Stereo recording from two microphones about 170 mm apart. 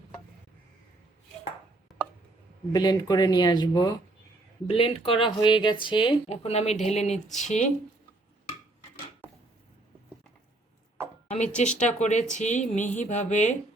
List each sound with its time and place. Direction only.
2.7 s speech: 25° left (ahead or behind)
4.6 s speech: 35° left (ahead or behind)
11.3 s speech: 45° left (ahead or behind)
11.7 s speech: 5° left (ahead or behind)
11.9 s speech: 45° left (ahead or behind)